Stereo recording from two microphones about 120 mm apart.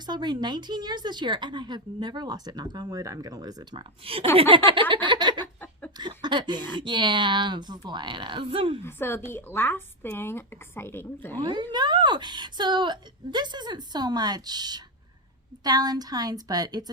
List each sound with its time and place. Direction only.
0.0 s a woman's voice: 35° right (ahead or behind)
4.0 s a sound: 50° right (ahead or behind)
6.0 s a woman's voice: 40° right (ahead or behind)
8.8 s speech: 20° left (ahead or behind)
11.3 s a woman's voice: 40° right (ahead or behind)